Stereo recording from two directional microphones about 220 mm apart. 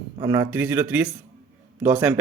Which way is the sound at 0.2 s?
15° right (ahead or behind).